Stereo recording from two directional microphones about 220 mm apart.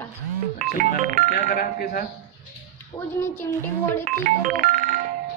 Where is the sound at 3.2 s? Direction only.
10° left (ahead or behind).